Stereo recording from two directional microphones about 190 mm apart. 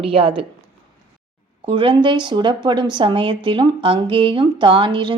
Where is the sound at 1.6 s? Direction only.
25° right (ahead or behind).